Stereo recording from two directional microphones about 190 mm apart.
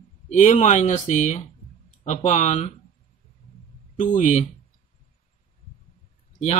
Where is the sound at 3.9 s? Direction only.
40° left (ahead or behind).